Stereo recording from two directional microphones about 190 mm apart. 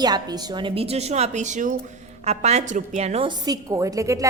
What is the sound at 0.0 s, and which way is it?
A woman's voice, 20° right (ahead or behind).